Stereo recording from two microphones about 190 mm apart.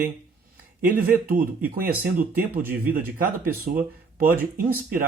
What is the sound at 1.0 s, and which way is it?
Speech, 50° right (ahead or behind).